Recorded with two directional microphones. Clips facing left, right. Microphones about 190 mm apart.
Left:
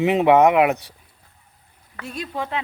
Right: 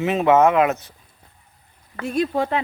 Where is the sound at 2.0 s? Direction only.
50° right (ahead or behind).